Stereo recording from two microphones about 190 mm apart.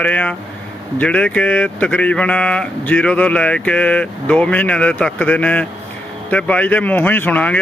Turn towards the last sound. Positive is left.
turn(degrees=10)  # may be behind; listen again after turning